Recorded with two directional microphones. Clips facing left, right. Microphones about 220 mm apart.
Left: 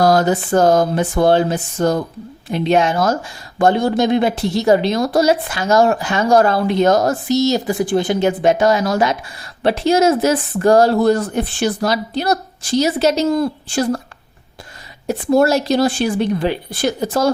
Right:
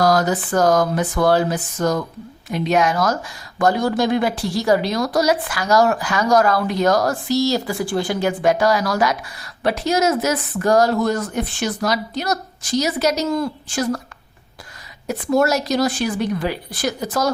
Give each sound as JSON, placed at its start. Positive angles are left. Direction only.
{"t": 0.0, "sound": "speech", "side_deg": 25}
{"t": 15.0, "sound": "speech", "side_deg": 30}